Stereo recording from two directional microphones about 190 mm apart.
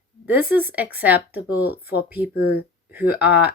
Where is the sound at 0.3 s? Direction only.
10° right (ahead or behind).